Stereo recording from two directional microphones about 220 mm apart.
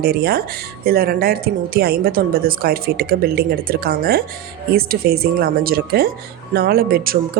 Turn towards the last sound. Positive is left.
turn(degrees=-40)  # may be behind; listen again after turning